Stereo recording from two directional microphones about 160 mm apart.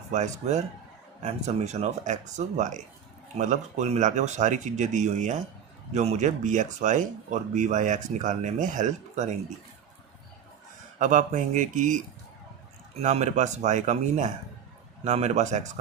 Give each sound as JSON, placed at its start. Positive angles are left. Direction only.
{"t": 0.1, "sound": "speech", "side_deg": -45}
{"t": 10.9, "sound": "speech", "side_deg": -50}